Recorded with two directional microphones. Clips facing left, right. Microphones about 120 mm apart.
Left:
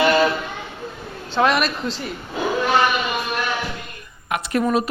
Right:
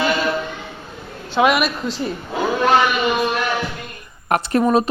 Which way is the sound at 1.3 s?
10° right (ahead or behind).